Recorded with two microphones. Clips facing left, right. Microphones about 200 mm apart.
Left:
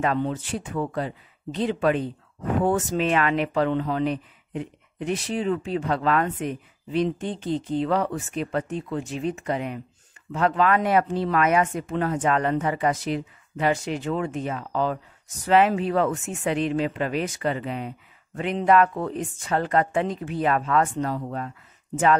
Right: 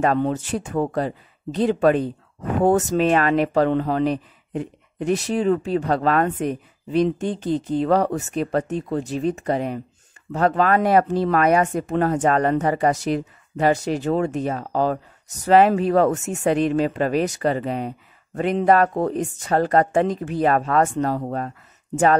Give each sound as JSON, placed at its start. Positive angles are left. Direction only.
{"t": 0.0, "sound": "speech", "side_deg": -45}